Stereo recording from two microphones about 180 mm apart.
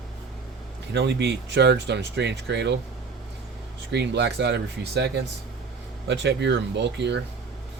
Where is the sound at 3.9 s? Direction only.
70° right (ahead or behind).